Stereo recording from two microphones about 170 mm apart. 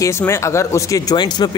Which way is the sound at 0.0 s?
15° left (ahead or behind).